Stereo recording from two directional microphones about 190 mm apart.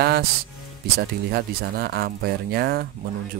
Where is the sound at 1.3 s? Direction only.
55° right (ahead or behind).